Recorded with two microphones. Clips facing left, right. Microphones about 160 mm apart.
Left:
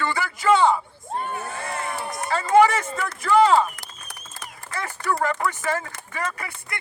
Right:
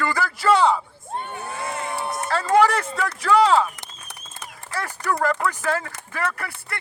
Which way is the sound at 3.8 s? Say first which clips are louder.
Even; 25° right (ahead or behind).